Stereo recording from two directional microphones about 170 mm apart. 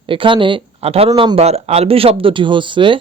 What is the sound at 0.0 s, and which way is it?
Speech, 30° right (ahead or behind).